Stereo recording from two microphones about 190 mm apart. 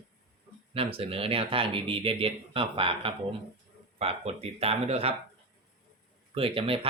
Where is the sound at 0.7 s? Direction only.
30° right (ahead or behind).